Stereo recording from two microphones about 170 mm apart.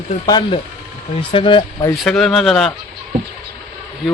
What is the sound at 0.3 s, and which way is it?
Speech, 25° left (ahead or behind).